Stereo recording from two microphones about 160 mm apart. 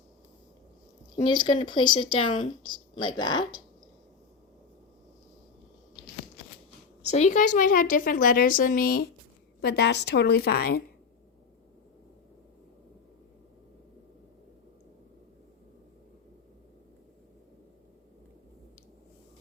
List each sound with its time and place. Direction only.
1.1 s speech: 30° left (ahead or behind)
7.0 s a woman's voice: 45° left (ahead or behind); by 9.0 s 65° left (ahead or behind)
9.6 s a woman's voice: 90° left; by 10.8 s 75° left (ahead or behind)